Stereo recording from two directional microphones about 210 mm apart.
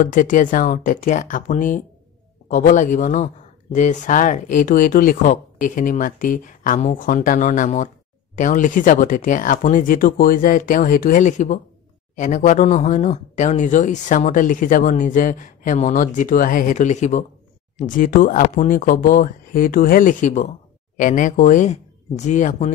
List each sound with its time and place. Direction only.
0.0 s speech: 40° left (ahead or behind)